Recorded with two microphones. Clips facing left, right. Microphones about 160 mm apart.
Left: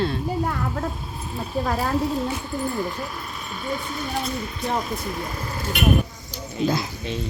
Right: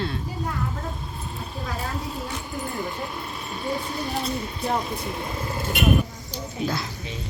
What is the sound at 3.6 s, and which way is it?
Speech, 30° right (ahead or behind).